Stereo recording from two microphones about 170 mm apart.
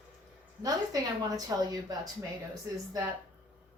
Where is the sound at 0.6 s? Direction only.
20° right (ahead or behind).